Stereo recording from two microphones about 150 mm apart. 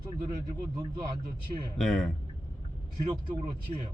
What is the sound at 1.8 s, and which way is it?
Speech, centre (ahead or behind).